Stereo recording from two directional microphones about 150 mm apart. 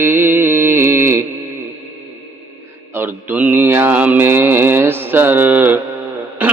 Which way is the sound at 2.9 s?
15° right (ahead or behind).